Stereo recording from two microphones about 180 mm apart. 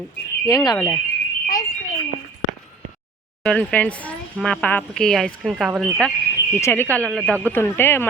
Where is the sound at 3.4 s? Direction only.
5° left (ahead or behind).